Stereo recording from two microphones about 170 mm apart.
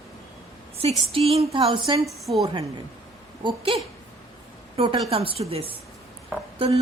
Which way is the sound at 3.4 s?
35° right (ahead or behind).